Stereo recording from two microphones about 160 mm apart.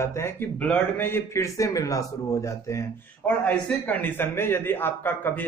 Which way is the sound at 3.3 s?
10° left (ahead or behind).